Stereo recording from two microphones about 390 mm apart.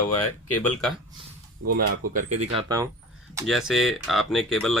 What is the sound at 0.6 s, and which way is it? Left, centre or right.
Speech, centre.